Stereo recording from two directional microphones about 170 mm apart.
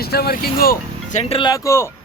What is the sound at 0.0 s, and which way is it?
Speech, 65° left (ahead or behind).